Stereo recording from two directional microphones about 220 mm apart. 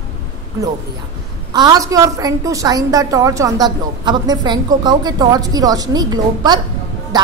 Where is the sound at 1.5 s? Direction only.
20° right (ahead or behind).